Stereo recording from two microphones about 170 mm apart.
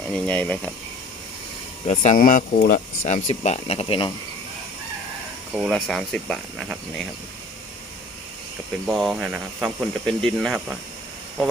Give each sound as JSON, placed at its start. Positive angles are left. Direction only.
{"t": 0.1, "sound": "speech", "side_deg": 10}
{"t": 1.9, "sound": "speech", "side_deg": 45}
{"t": 5.5, "sound": "speech", "side_deg": 0}
{"t": 8.9, "sound": "speech", "side_deg": 0}